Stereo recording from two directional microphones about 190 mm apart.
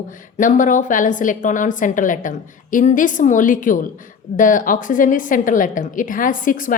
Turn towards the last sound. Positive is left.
turn(degrees=45)  # may be behind; listen again after turning